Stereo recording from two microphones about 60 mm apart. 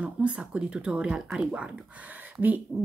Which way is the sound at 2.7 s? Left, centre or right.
Centre.